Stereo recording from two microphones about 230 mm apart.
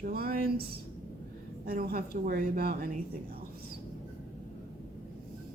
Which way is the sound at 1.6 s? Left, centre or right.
Right.